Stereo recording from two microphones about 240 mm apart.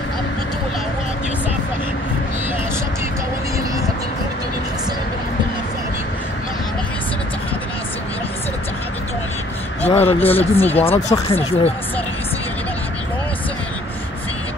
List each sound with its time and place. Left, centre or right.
9.8 s speech: left